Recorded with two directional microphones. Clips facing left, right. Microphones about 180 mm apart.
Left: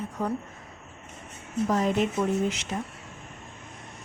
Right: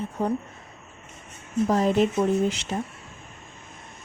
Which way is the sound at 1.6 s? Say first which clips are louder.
Right 4 dB; 35° right (ahead or behind).